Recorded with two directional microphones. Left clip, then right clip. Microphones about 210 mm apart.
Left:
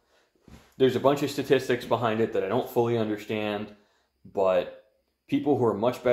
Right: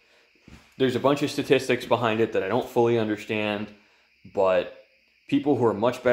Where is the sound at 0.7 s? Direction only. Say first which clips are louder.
Even; 25° right (ahead or behind).